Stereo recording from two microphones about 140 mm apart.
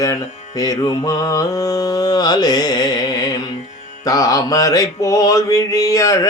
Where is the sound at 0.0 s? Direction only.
25° left (ahead or behind).